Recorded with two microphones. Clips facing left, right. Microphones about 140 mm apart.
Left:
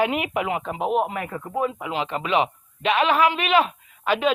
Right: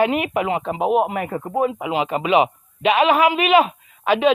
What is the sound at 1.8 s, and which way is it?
A man's voice, 10° right (ahead or behind).